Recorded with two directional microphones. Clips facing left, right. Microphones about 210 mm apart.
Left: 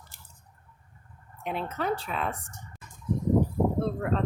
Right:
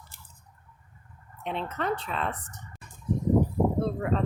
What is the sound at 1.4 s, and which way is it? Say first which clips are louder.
Speech: even; 5° left (ahead or behind).